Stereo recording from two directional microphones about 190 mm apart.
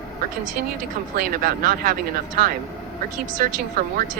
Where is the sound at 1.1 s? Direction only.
50° right (ahead or behind).